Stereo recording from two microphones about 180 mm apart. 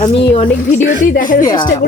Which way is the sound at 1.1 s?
50° left (ahead or behind).